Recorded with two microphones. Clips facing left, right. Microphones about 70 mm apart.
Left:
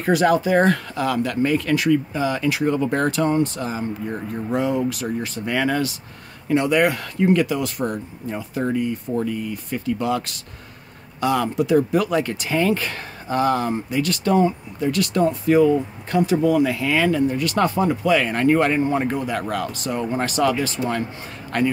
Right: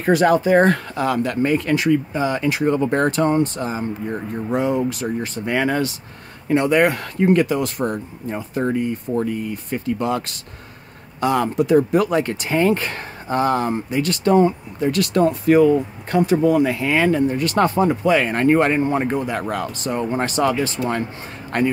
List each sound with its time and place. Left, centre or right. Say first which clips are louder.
0.0 s speech: right 2 dB; right